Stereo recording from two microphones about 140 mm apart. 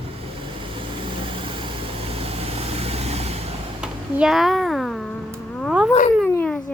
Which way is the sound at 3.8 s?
5° right (ahead or behind).